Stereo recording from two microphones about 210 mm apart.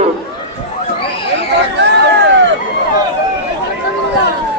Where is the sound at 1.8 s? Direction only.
55° right (ahead or behind).